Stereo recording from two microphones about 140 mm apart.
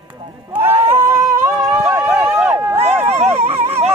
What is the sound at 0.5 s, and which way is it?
Speech, 15° right (ahead or behind).